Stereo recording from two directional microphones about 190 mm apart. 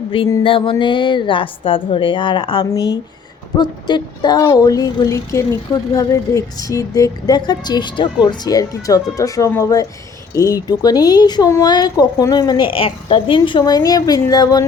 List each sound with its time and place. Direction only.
0.3 s speech: 25° left (ahead or behind)